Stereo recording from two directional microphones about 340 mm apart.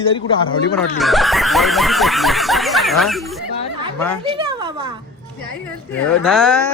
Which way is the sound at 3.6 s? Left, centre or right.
Centre.